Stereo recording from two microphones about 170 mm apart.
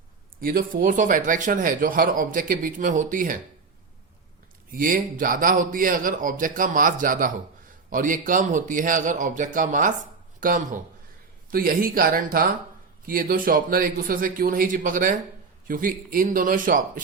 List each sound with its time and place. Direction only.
0.4 s speech: 55° right (ahead or behind)
4.7 s speech: 55° right (ahead or behind)